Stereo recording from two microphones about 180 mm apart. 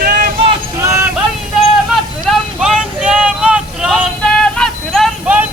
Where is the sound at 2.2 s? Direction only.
Centre (ahead or behind).